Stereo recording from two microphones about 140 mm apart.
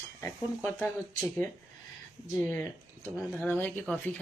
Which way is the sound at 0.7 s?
5° left (ahead or behind).